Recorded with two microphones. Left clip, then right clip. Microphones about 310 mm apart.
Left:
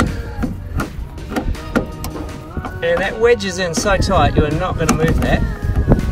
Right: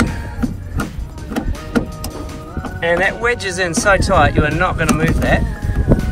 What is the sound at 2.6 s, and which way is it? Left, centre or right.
Speech, centre.